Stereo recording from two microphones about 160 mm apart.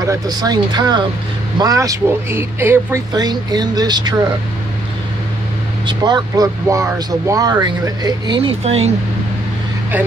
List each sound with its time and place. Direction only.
0.0 s speech: 25° right (ahead or behind)
5.9 s speech: 25° right (ahead or behind)